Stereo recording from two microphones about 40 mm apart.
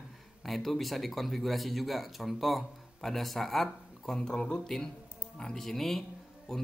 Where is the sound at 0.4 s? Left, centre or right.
Centre.